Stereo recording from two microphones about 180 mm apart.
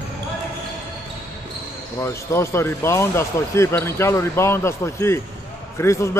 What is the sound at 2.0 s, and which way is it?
Speech, 15° left (ahead or behind).